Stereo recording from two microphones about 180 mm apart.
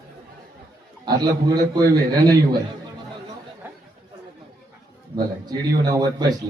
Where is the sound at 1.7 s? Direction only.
20° right (ahead or behind).